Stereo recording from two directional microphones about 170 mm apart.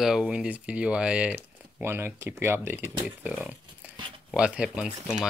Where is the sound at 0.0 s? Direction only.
5° right (ahead or behind).